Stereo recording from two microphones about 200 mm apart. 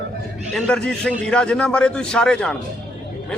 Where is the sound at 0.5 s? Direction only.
5° left (ahead or behind).